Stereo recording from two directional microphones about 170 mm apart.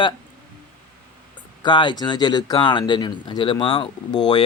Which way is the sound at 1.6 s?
25° left (ahead or behind).